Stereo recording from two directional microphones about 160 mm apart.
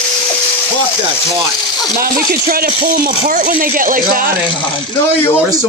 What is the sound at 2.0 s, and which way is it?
Speech, 65° right (ahead or behind).